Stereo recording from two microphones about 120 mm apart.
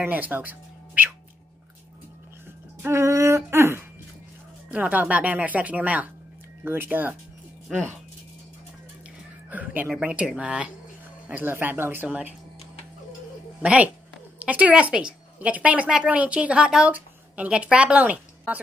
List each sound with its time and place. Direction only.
0.0 s speech: 15° right (ahead or behind)
2.8 s a sound: 20° right (ahead or behind)
4.6 s speech: 10° right (ahead or behind)
9.5 s speech: 15° right (ahead or behind)
13.6 s a woman's voice: 10° right (ahead or behind)